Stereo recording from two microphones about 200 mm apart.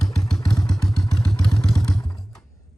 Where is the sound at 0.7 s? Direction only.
Centre (ahead or behind).